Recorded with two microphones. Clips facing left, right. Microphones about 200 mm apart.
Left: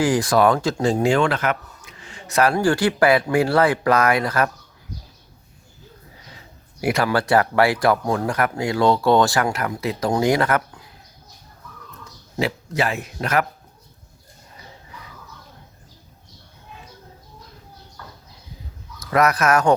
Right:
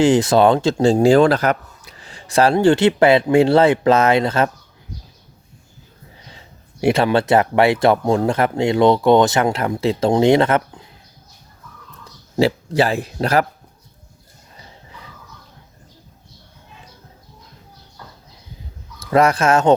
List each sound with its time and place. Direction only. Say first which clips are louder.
0.0 s speech: right 4 dB; 25° right (ahead or behind)
6.8 s speech: right 5 dB; 25° right (ahead or behind)
12.4 s speech: right 7 dB; 30° right (ahead or behind)
18.9 s speech: right 4 dB; 30° right (ahead or behind)